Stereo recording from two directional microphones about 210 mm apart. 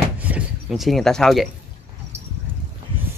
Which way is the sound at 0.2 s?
5° right (ahead or behind).